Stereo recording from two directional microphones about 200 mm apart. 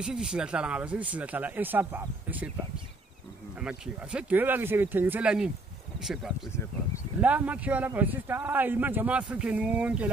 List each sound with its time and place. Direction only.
0.0 s speech: 5° right (ahead or behind)
3.6 s speech: 5° right (ahead or behind)